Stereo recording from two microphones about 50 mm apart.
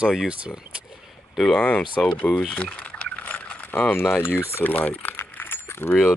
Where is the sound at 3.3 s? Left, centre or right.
Left.